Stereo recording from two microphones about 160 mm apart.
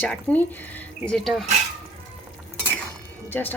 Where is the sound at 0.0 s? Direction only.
10° left (ahead or behind).